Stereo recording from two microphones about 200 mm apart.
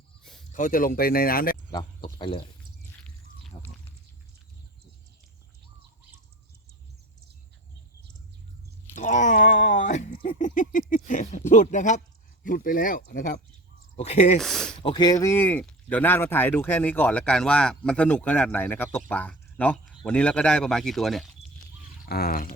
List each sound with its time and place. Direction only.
0.5 s speech: 40° left (ahead or behind)
1.7 s speech: 25° left (ahead or behind)
3.5 s a sound: 25° left (ahead or behind)
9.0 s speech: 40° left (ahead or behind)
14.3 s speech: centre (ahead or behind)
14.8 s speech: 25° left (ahead or behind); by 21.2 s centre (ahead or behind)
22.0 s speech: 45° left (ahead or behind)